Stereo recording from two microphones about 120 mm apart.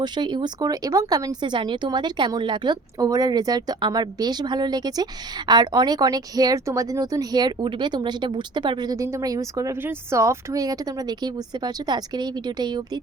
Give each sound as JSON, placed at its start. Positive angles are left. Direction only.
{"t": 0.0, "sound": "speech", "side_deg": -40}
{"t": 9.7, "sound": "speech", "side_deg": -15}